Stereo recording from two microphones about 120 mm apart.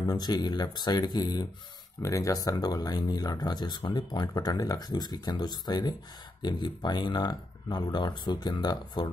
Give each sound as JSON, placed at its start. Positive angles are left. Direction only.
{"t": 0.1, "sound": "speech", "side_deg": 35}